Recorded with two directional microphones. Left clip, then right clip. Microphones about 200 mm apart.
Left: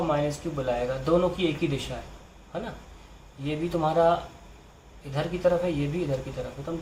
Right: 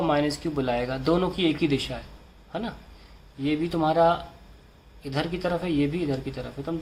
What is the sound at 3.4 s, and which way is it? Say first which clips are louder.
A man's voice: right 2 dB; 40° right (ahead or behind).